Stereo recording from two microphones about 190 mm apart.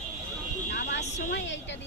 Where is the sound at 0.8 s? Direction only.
65° left (ahead or behind).